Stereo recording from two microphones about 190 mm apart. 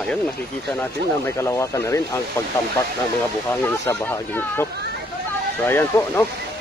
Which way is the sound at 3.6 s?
15° left (ahead or behind).